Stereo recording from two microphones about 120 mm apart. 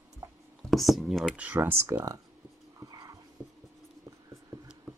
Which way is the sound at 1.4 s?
15° right (ahead or behind).